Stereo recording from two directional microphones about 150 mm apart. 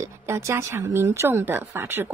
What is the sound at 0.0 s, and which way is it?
A woman's voice, 20° right (ahead or behind).